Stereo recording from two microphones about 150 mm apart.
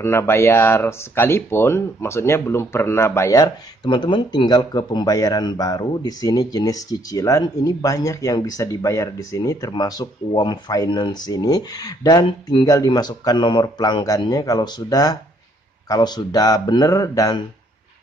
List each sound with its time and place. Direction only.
0.0 s speech: 15° left (ahead or behind)